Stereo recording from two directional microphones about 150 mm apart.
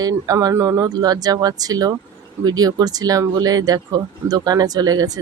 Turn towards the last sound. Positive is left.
turn(degrees=-25)  # may be behind; listen again after turning